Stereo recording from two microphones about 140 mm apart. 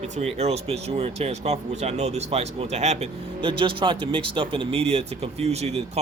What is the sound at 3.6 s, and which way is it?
Speech, 35° right (ahead or behind).